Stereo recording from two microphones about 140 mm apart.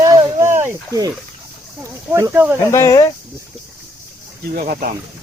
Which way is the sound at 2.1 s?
20° right (ahead or behind).